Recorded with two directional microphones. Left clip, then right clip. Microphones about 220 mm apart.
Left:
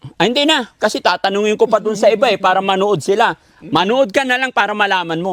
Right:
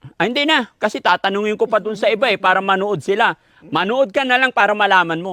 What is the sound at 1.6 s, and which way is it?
Speech, 20° right (ahead or behind).